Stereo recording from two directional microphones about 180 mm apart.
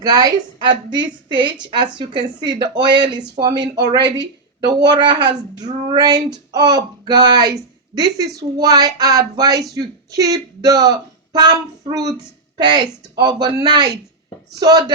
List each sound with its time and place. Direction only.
0.0 s speech: 20° right (ahead or behind)